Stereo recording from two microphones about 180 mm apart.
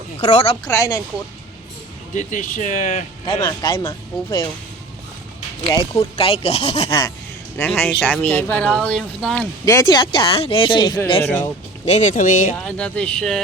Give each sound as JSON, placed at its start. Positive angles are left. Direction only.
{"t": 0.2, "sound": "speech", "side_deg": 35}
{"t": 0.6, "sound": "speech", "side_deg": 20}
{"t": 2.1, "sound": "speech", "side_deg": 45}
{"t": 3.2, "sound": "speech", "side_deg": 25}
{"t": 5.7, "sound": "speech", "side_deg": 25}
{"t": 7.6, "sound": "speech", "side_deg": 10}
{"t": 9.6, "sound": "speech", "side_deg": 20}
{"t": 11.9, "sound": "speech", "side_deg": 40}
{"t": 12.5, "sound": "speech", "side_deg": 5}